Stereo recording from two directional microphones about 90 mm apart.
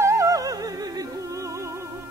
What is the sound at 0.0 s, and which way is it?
Music, 35° right (ahead or behind).